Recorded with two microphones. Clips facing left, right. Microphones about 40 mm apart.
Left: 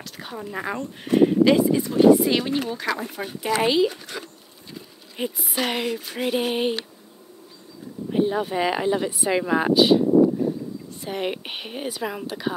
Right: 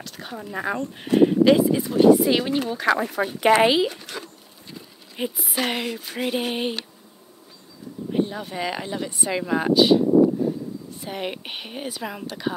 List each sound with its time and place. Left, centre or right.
0.0 s speech: centre
3.0 s speech: right
3.6 s speech: centre
5.1 s speech: centre
8.1 s speech: centre